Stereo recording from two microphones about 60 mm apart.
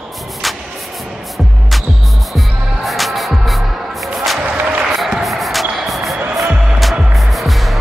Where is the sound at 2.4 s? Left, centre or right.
Centre.